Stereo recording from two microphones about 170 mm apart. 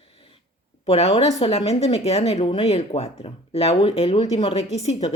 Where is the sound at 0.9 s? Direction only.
35° left (ahead or behind).